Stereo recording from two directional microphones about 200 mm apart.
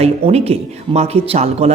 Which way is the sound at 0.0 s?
30° right (ahead or behind).